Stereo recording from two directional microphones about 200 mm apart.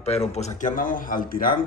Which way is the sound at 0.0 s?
30° left (ahead or behind).